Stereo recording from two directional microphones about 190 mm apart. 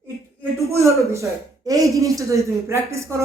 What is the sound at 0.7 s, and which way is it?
Speech, 15° right (ahead or behind).